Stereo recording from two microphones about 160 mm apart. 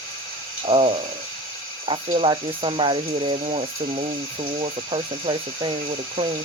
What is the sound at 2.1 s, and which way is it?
Speech, 35° right (ahead or behind).